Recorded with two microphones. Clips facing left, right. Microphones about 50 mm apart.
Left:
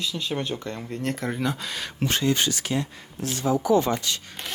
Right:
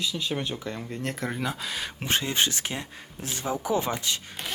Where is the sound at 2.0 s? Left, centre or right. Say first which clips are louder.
Left 3 dB; right.